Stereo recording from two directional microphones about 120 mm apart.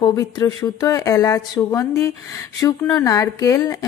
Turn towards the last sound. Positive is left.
turn(degrees=30)  # may be behind; listen again after turning